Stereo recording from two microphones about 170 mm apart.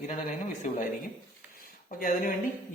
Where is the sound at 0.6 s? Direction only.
50° left (ahead or behind).